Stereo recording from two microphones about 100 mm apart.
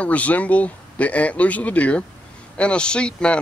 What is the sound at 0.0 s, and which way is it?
Speech, 15° left (ahead or behind).